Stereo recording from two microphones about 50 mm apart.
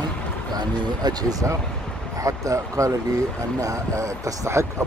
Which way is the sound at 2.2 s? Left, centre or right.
Right.